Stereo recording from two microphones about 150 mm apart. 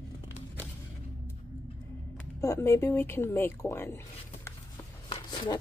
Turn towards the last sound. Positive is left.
turn(degrees=30)  # may be behind; listen again after turning